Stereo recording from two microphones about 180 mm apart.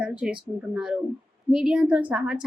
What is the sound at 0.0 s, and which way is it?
A woman's voice, 5° right (ahead or behind).